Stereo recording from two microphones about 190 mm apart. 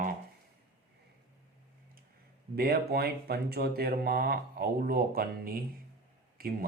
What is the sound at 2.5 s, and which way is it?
Speech, 55° right (ahead or behind).